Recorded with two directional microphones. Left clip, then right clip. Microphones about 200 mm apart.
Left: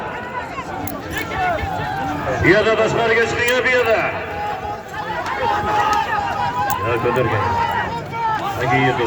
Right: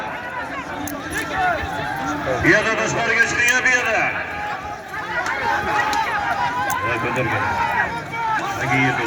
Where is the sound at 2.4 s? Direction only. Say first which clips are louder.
Left 3 dB; 50° right (ahead or behind).